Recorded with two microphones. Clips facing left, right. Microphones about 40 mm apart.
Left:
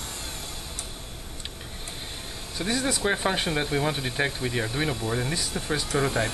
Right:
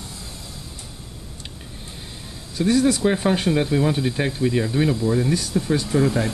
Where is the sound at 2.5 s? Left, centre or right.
Left.